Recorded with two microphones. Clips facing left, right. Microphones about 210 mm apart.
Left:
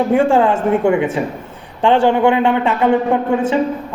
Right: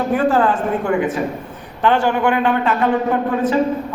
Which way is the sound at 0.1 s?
25° left (ahead or behind).